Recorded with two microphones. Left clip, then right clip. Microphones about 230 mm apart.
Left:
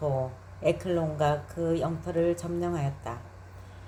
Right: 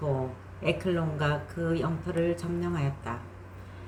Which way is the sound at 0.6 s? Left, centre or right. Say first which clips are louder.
Left 2 dB; left.